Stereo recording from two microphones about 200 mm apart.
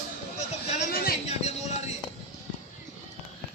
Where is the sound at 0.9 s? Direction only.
50° left (ahead or behind).